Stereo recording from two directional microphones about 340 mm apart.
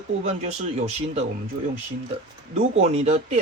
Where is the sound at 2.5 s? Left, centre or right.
Centre.